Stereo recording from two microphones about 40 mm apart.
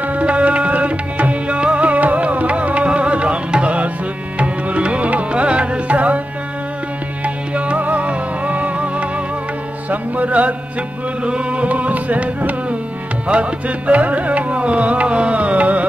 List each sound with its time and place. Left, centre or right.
0.0 s music: right
7.2 s music: right